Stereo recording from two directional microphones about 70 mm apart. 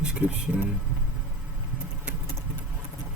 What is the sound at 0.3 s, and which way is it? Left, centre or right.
Speech, right.